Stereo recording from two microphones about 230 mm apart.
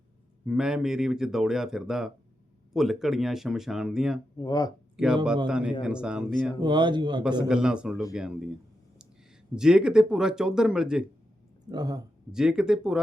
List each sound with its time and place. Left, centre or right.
0.4 s speech: centre
4.4 s speech: centre
5.5 s speech: centre
6.6 s speech: centre
7.4 s speech: centre
9.6 s speech: centre
11.7 s speech: centre
12.3 s speech: centre